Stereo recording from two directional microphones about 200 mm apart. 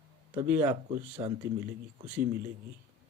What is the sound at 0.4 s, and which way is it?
Speech, 10° right (ahead or behind).